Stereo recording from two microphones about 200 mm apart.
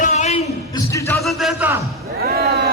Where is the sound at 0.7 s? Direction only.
15° left (ahead or behind).